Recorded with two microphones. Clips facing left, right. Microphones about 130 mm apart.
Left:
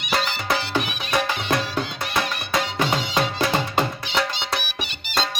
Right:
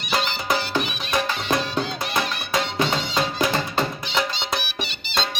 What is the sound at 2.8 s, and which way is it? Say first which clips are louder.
Music: left 3 dB; 10° left (ahead or behind).